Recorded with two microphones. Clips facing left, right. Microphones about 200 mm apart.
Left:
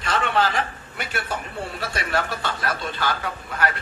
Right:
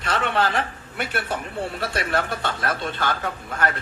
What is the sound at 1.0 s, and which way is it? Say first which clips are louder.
A man's voice: right 2 dB; 55° right (ahead or behind).